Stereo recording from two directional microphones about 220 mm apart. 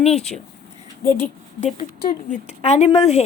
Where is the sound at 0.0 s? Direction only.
30° left (ahead or behind).